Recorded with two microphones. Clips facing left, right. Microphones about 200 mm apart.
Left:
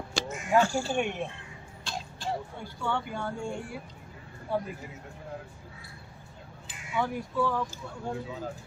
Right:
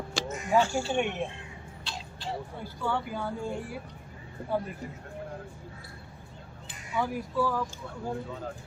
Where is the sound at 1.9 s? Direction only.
45° left (ahead or behind).